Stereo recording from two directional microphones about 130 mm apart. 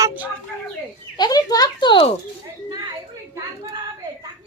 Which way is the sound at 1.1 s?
30° left (ahead or behind).